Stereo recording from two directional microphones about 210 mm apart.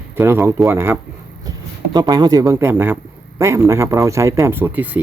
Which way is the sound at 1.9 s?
20° right (ahead or behind).